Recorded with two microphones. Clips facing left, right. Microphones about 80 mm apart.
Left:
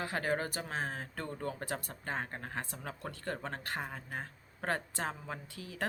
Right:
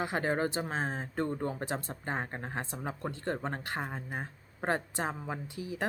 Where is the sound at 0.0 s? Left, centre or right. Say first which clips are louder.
Right 4 dB; right.